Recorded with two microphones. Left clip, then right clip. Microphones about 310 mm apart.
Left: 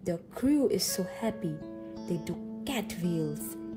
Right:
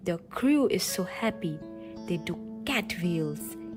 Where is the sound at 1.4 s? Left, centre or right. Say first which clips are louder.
Right 1 dB; centre.